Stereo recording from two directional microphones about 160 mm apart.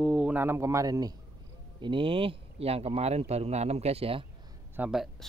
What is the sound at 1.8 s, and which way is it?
Speech, 30° right (ahead or behind).